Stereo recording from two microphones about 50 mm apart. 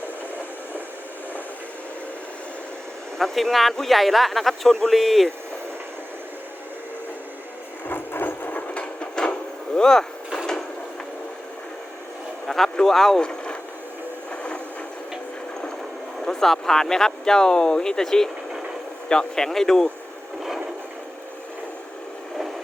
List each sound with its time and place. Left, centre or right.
3.2 s speech: centre
7.9 s a sound: left
8.7 s a sound: left
12.5 s speech: centre
13.2 s boat: left
16.2 s speech: centre